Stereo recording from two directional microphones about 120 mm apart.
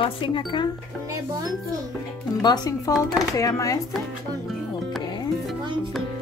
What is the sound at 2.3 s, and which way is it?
Speech, 35° left (ahead or behind).